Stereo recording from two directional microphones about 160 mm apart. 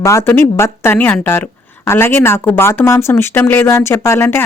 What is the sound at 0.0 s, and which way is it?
Speech, 15° left (ahead or behind).